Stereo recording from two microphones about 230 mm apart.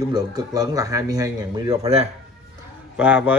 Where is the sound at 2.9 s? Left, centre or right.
Centre.